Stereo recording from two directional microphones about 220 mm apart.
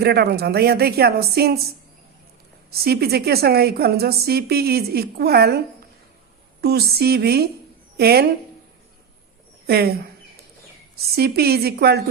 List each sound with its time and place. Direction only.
0.0 s a woman's voice: 45° right (ahead or behind)
2.6 s a woman's voice: 45° right (ahead or behind)
6.6 s a woman's voice: 45° right (ahead or behind)
9.6 s a woman's voice: 45° right (ahead or behind)